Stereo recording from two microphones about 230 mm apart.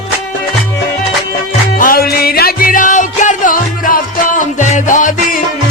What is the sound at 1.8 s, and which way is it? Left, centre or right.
Music, left.